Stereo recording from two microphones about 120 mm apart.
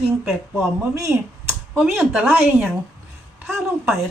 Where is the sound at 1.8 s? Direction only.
10° right (ahead or behind).